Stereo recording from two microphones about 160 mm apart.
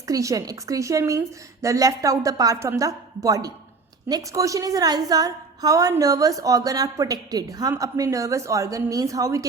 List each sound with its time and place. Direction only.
0.1 s a woman's voice: 20° right (ahead or behind)